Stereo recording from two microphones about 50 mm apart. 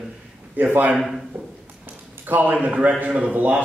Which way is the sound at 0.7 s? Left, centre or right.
Right.